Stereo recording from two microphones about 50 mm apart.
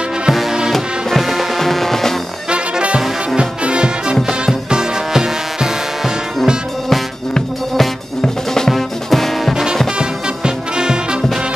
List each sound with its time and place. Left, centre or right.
0.3 s music: centre
2.5 s music: right
8.5 s music: centre
9.5 s music: centre